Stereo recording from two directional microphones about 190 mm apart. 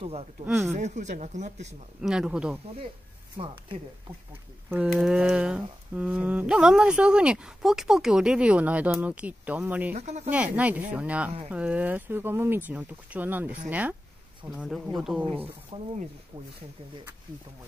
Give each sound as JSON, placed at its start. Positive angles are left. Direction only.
{"t": 0.0, "sound": "speech", "side_deg": -35}
{"t": 0.5, "sound": "speech", "side_deg": 0}
{"t": 0.7, "sound": "speech", "side_deg": -40}
{"t": 2.0, "sound": "speech", "side_deg": -5}
{"t": 3.3, "sound": "speech", "side_deg": -25}
{"t": 4.6, "sound": "speech", "side_deg": -5}
{"t": 9.9, "sound": "speech", "side_deg": -35}
{"t": 10.3, "sound": "speech", "side_deg": -5}
{"t": 15.3, "sound": "speech", "side_deg": -30}